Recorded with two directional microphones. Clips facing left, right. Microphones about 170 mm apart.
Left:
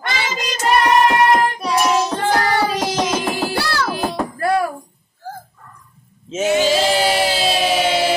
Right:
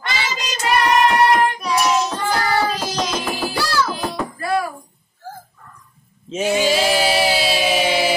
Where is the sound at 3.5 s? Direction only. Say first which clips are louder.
Even; 60° left (ahead or behind).